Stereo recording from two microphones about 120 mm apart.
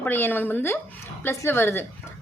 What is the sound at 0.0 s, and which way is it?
A woman's voice, 15° left (ahead or behind).